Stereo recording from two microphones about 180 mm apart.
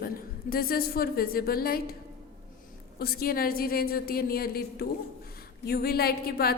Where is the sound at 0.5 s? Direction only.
55° left (ahead or behind).